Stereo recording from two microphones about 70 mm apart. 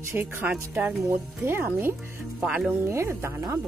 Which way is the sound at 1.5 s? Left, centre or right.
Right.